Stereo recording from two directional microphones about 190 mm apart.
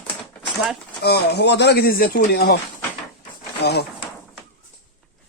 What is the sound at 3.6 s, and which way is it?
Speech, 60° left (ahead or behind).